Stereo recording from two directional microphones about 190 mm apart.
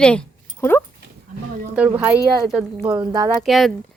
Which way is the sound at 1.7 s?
5° right (ahead or behind).